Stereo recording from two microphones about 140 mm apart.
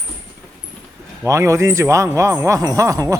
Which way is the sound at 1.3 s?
20° right (ahead or behind).